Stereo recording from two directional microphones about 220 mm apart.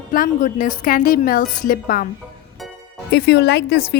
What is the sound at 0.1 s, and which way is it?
A woman's voice, 40° left (ahead or behind).